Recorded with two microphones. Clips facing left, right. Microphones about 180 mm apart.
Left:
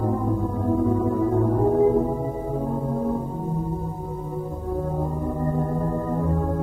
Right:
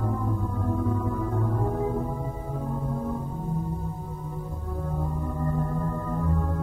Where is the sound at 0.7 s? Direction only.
30° left (ahead or behind).